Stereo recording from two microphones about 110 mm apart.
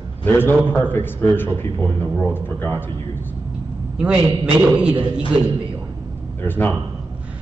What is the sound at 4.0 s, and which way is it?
Speech, 10° right (ahead or behind).